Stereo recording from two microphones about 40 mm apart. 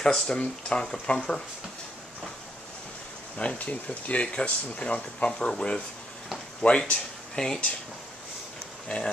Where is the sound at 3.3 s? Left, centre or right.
Left.